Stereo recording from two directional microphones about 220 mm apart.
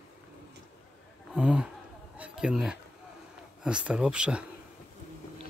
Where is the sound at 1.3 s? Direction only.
5° right (ahead or behind).